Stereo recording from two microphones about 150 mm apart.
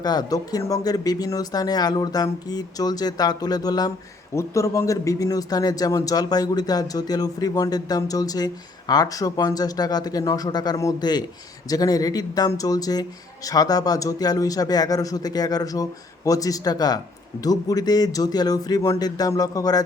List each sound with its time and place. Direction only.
0.0 s speech: 25° left (ahead or behind)